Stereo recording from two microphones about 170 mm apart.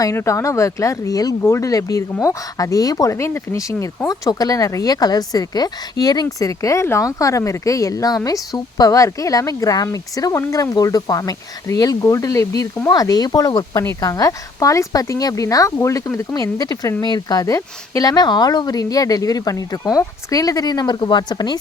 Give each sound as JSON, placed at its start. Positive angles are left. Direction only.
{"t": 0.0, "sound": "speech", "side_deg": 15}